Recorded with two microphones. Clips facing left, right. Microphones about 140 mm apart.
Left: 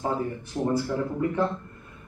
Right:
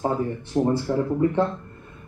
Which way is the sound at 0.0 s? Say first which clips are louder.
Right 3 dB; 25° right (ahead or behind).